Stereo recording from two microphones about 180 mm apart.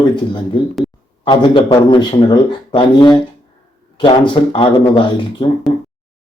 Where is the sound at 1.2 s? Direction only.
25° left (ahead or behind).